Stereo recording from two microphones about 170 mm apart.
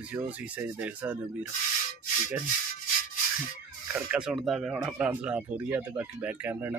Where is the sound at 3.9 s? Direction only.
5° right (ahead or behind).